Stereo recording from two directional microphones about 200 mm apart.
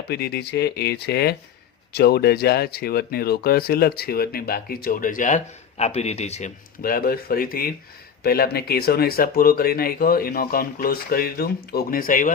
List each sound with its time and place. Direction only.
0.1 s speech: 50° left (ahead or behind); by 6.5 s 35° left (ahead or behind)
6.8 s speech: 50° left (ahead or behind)